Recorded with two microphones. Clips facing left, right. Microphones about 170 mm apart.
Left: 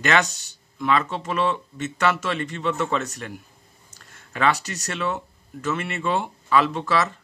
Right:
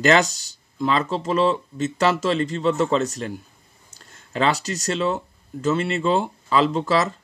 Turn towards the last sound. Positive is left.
turn(degrees=-30)  # may be behind; listen again after turning